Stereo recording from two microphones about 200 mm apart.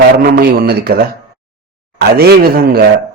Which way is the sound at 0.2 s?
50° right (ahead or behind).